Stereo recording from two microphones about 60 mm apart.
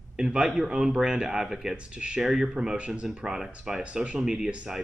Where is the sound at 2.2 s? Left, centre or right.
Centre.